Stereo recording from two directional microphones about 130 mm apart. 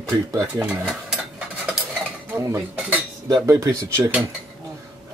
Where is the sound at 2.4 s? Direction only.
25° right (ahead or behind).